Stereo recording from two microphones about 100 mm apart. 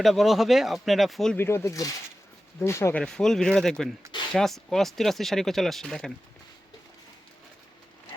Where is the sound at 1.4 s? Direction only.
25° left (ahead or behind).